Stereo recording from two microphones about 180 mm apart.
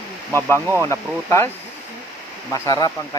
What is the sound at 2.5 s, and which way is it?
Speech, 20° left (ahead or behind).